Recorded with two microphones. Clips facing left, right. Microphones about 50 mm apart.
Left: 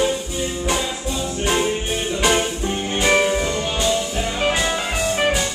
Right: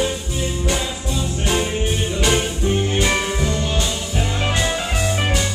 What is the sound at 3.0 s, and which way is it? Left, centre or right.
Music, centre.